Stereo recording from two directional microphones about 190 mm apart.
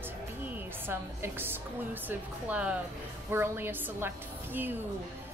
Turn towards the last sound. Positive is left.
turn(degrees=-10)  # may be behind; listen again after turning